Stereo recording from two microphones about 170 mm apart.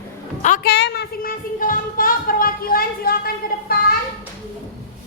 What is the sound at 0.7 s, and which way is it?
Child singing, 75° left (ahead or behind).